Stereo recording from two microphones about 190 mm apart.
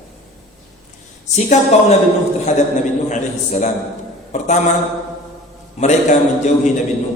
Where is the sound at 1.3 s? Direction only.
40° left (ahead or behind).